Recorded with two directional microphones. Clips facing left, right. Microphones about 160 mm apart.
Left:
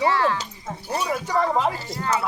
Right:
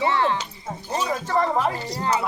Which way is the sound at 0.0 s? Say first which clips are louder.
Left 1 dB; 25° right (ahead or behind).